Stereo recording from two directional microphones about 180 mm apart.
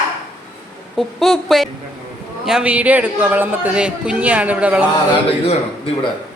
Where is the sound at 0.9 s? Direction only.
Centre (ahead or behind).